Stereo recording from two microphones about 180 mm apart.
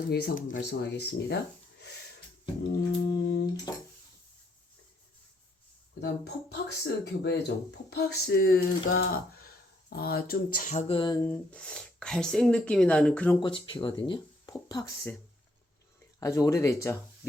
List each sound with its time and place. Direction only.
0.1 s typing: 60° left (ahead or behind)
2.6 s speech: 70° left (ahead or behind)
6.0 s speech: 65° left (ahead or behind)
7.9 s typing: 60° left (ahead or behind)
9.9 s speech: 60° left (ahead or behind); by 11.2 s 25° left (ahead or behind)
11.3 s speech: 5° left (ahead or behind)
13.4 s speech: 30° left (ahead or behind)
16.2 s speech: 20° left (ahead or behind)